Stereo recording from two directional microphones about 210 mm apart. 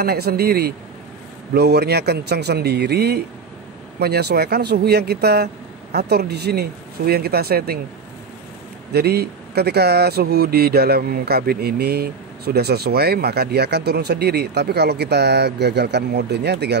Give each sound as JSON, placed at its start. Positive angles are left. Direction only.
{"t": 0.0, "sound": "speech", "side_deg": -50}
{"t": 8.9, "sound": "speech", "side_deg": -50}